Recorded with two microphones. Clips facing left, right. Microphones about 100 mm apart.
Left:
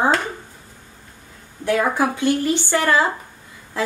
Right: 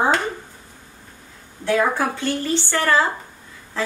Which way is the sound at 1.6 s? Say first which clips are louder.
Left 1 dB; 15° left (ahead or behind).